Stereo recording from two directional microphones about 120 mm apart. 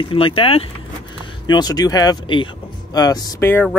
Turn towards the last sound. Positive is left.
turn(degrees=30)  # may be behind; listen again after turning